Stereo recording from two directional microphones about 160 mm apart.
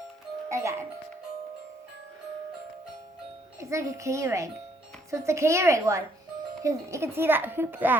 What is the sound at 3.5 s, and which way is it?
A woman's voice, 20° right (ahead or behind).